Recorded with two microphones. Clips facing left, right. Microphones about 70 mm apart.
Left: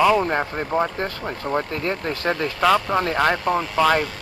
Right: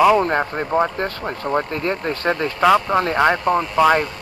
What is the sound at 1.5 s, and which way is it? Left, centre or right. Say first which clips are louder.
Speech: right 3 dB; right.